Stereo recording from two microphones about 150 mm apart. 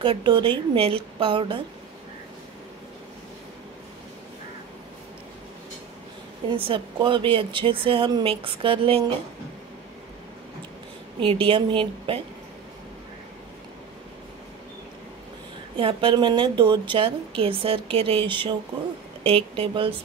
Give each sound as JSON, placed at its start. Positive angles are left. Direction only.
{"t": 0.0, "sound": "a woman's voice", "side_deg": -30}
{"t": 6.5, "sound": "a woman's voice", "side_deg": -35}
{"t": 11.1, "sound": "a woman's voice", "side_deg": -35}
{"t": 15.8, "sound": "a woman's voice", "side_deg": -35}